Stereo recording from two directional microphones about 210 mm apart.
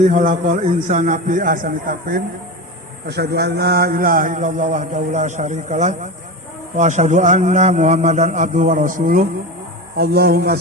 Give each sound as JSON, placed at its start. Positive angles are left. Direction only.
{"t": 0.0, "sound": "a man's voice", "side_deg": -40}
{"t": 3.1, "sound": "a man's voice", "side_deg": -50}